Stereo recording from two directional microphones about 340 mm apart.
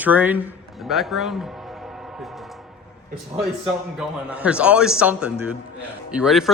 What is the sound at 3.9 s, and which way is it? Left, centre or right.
Speech, centre.